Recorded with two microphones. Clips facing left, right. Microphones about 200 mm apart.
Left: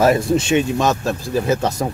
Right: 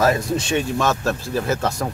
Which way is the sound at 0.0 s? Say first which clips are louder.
Left 4 dB; 20° left (ahead or behind).